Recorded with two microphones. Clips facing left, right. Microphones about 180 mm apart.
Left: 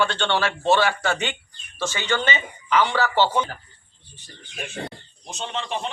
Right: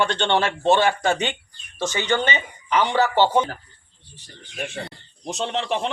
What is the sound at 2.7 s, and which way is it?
Speech, 15° right (ahead or behind).